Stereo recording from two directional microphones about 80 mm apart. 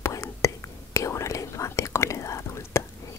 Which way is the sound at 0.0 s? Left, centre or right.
Left.